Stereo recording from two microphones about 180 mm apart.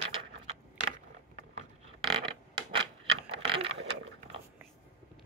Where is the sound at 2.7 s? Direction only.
30° right (ahead or behind).